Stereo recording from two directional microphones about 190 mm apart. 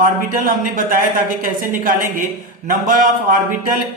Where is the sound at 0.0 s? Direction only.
45° right (ahead or behind).